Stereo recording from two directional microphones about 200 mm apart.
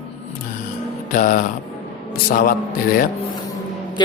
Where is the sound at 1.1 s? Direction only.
45° left (ahead or behind).